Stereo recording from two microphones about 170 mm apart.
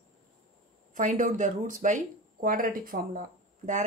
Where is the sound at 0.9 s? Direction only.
50° right (ahead or behind).